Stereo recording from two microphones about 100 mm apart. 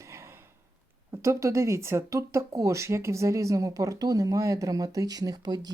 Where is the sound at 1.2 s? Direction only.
30° right (ahead or behind).